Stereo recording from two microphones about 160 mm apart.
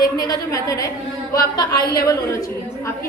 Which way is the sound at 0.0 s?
25° left (ahead or behind).